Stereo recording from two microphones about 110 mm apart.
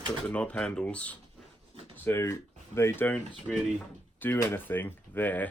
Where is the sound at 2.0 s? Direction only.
25° left (ahead or behind).